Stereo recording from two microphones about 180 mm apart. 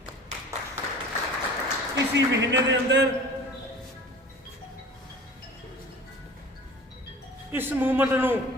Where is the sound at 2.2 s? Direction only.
75° right (ahead or behind).